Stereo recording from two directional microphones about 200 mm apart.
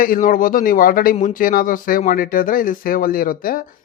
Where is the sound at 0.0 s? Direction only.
45° left (ahead or behind).